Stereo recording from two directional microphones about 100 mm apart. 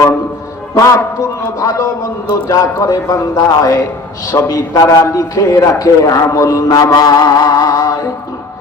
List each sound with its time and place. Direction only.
0.7 s a man's voice: 30° left (ahead or behind)
2.3 s a man's voice: 35° left (ahead or behind)
6.9 s music: 45° left (ahead or behind)